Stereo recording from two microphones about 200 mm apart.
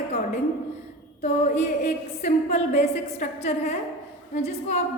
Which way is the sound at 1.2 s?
35° left (ahead or behind).